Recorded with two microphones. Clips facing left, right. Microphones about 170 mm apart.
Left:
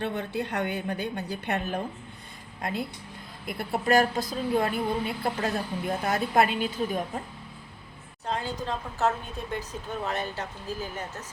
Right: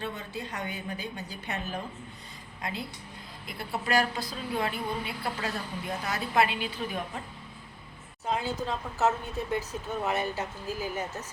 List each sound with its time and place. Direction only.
0.0 s a woman's voice: 60° left (ahead or behind); by 7.2 s 45° left (ahead or behind)
8.3 s a woman's voice: 5° right (ahead or behind)